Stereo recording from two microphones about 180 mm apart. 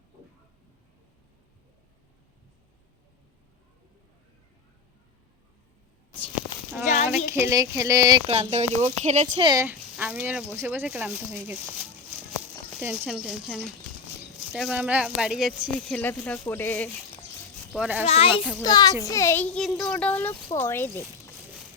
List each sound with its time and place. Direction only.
6.8 s a sound: 45° left (ahead or behind)
7.3 s speech: 15° right (ahead or behind)
8.3 s speech: 40° right (ahead or behind)
9.4 s speech: 25° right (ahead or behind)
9.6 s speech: 5° right (ahead or behind)
12.4 s a sound: 10° right (ahead or behind)
13.1 s speech: centre (ahead or behind)
16.0 s a child's voice: 10° left (ahead or behind)
17.7 s speech: 10° right (ahead or behind)
18.0 s a child's voice: 35° left (ahead or behind); by 21.0 s 15° left (ahead or behind)